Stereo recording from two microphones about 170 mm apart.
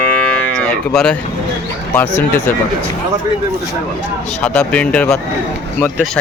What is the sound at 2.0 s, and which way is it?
Speech, 10° left (ahead or behind).